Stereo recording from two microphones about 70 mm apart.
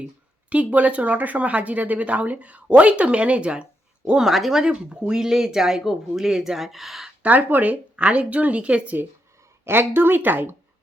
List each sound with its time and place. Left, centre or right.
0.5 s speech: right; by 7.1 s centre
7.2 s speech: right
9.6 s speech: right